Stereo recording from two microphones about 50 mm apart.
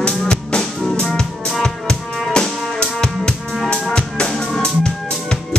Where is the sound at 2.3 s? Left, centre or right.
Centre.